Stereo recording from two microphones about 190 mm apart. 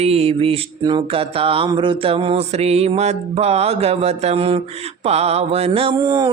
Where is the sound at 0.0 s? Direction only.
30° right (ahead or behind).